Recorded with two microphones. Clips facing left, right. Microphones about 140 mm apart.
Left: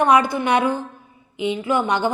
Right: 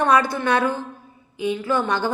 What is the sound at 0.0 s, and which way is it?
A woman's voice, 15° left (ahead or behind).